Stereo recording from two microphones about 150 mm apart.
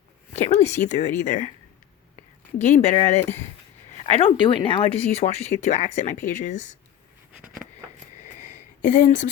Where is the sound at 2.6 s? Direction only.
45° left (ahead or behind).